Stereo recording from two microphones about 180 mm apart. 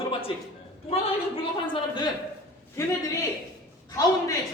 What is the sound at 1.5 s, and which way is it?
Speech, 25° left (ahead or behind).